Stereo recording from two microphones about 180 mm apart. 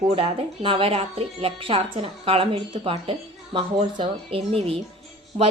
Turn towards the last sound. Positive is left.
turn(degrees=-35)  # may be behind; listen again after turning